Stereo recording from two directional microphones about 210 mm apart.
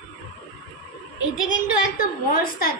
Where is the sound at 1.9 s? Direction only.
45° left (ahead or behind).